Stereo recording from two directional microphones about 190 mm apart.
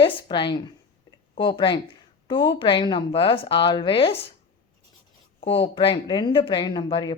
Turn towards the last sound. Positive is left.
turn(degrees=25)  # may be behind; listen again after turning